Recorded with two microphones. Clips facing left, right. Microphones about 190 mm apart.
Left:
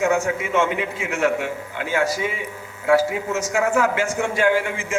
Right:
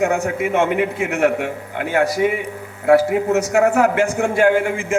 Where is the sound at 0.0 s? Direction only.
55° right (ahead or behind).